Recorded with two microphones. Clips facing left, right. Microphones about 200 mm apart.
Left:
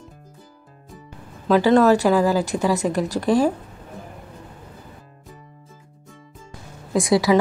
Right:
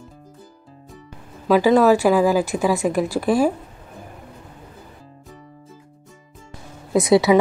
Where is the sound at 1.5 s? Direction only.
10° right (ahead or behind).